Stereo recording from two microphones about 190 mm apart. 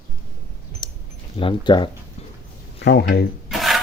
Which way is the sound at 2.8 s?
60° left (ahead or behind).